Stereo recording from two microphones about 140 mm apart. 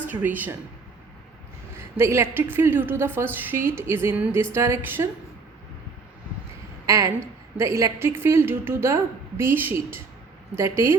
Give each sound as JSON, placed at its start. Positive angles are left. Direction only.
{"t": 0.1, "sound": "a woman's voice", "side_deg": -10}
{"t": 1.7, "sound": "a woman's voice", "side_deg": -20}
{"t": 6.8, "sound": "a woman's voice", "side_deg": -20}